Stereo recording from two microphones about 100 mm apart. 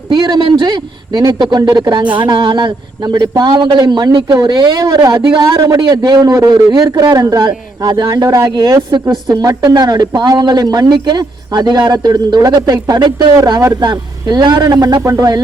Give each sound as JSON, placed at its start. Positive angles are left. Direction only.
{"t": 0.1, "sound": "a man's voice", "side_deg": -45}